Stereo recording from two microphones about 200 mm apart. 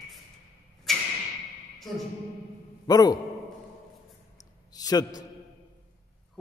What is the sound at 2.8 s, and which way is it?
Speech, 20° left (ahead or behind).